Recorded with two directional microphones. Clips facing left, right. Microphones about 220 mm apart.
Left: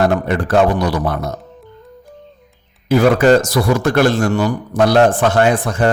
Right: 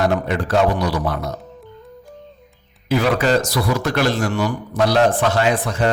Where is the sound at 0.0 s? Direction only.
55° left (ahead or behind).